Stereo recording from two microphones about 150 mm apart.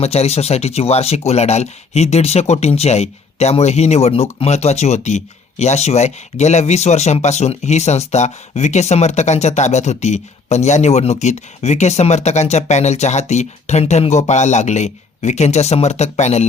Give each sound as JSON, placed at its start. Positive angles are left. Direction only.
{"t": 0.0, "sound": "speech", "side_deg": 45}